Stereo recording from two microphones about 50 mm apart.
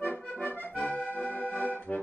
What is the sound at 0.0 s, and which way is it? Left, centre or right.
Accordion, left.